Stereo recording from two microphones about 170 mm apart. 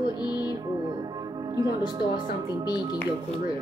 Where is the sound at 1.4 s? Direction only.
20° right (ahead or behind).